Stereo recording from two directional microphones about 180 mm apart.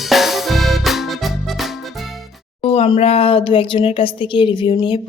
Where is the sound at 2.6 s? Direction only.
35° left (ahead or behind).